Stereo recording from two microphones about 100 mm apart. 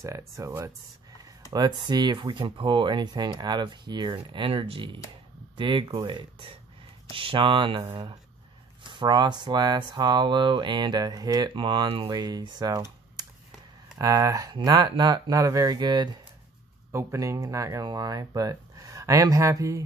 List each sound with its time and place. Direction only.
0.0 s speech: 35° right (ahead or behind)
1.5 s speech: 45° right (ahead or behind)
2.1 s speech: 60° right (ahead or behind)
7.9 s speech: 45° right (ahead or behind)
11.5 s speech: 55° right (ahead or behind)
12.1 s speech: 45° right (ahead or behind)
13.2 s a sound: 45° right (ahead or behind)
13.9 s speech: 35° right (ahead or behind)
16.9 s speech: 30° right (ahead or behind)